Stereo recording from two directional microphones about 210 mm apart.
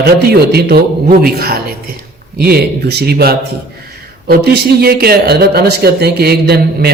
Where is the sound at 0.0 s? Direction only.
50° right (ahead or behind).